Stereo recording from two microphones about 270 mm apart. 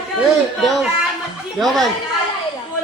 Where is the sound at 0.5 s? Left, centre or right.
Centre.